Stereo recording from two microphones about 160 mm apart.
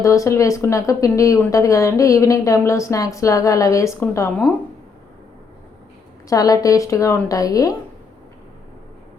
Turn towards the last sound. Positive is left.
turn(degrees=20)  # may be behind; listen again after turning